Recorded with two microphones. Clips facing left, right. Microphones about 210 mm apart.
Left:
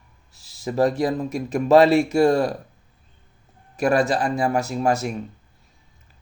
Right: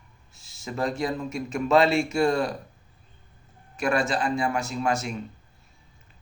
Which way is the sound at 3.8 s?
40° left (ahead or behind).